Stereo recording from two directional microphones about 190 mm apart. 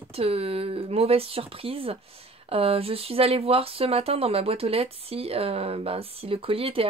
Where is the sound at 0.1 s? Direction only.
30° right (ahead or behind).